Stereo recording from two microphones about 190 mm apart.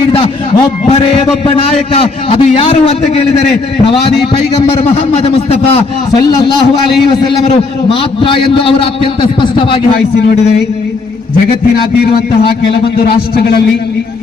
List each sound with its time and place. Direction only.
1.5 s a man's voice: 30° left (ahead or behind)
4.5 s a man's voice: 30° left (ahead or behind)
6.1 s a man's voice: 20° left (ahead or behind)
8.2 s a man's voice: 25° left (ahead or behind)
13.3 s a man's voice: 55° left (ahead or behind)